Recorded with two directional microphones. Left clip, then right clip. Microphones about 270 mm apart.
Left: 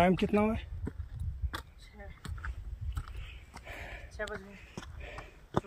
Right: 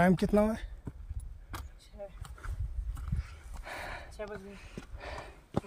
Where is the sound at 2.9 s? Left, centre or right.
Right.